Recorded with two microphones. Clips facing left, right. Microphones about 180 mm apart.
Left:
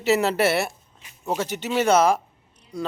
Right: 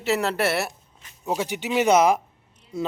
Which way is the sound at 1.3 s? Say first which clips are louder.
Even; 15° right (ahead or behind).